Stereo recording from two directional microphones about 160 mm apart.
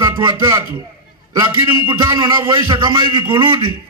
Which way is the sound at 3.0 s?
30° right (ahead or behind).